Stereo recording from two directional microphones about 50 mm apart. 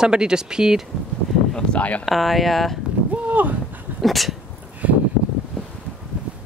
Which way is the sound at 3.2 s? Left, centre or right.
Right.